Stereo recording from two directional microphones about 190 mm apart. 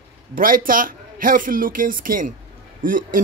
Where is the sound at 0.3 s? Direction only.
45° right (ahead or behind).